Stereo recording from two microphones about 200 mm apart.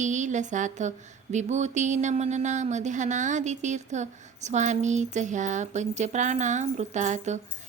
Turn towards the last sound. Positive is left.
turn(degrees=-35)  # may be behind; listen again after turning